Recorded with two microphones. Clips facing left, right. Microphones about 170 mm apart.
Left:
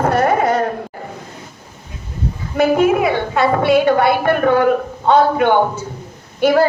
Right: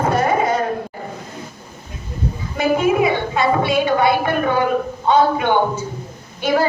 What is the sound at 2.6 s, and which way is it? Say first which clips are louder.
A woman's voice: left 3 dB; 60° left (ahead or behind).